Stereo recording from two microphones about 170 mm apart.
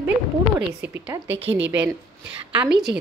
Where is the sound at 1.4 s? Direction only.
90° right.